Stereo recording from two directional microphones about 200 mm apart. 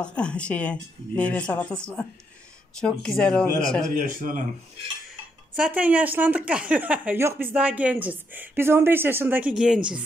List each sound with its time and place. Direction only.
0.0 s speech: 5° left (ahead or behind)
2.8 s speech: 5° left (ahead or behind)
4.0 s speech: 40° right (ahead or behind)
5.6 s speech: 5° right (ahead or behind)